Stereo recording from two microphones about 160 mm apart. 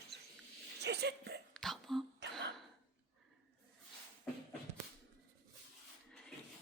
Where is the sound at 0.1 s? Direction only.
90° right.